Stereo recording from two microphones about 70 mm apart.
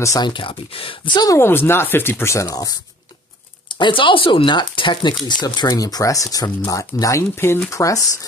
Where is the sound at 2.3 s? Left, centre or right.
Left.